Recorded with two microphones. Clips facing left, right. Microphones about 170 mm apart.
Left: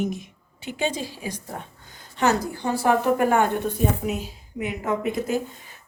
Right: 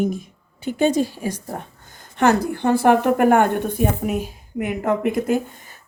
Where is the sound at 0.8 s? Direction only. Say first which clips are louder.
Right 9 dB; 45° right (ahead or behind).